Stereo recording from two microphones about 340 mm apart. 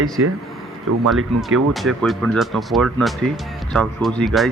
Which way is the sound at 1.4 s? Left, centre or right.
Centre.